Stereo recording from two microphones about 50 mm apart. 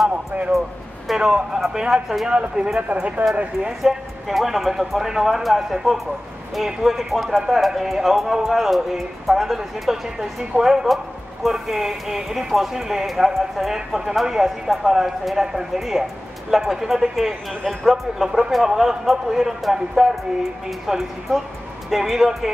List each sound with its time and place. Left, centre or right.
1.0 s speech: centre
2.9 s speech: right
3.8 s speech: centre